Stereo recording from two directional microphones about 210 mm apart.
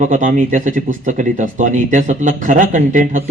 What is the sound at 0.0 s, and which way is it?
A man's voice, 40° right (ahead or behind).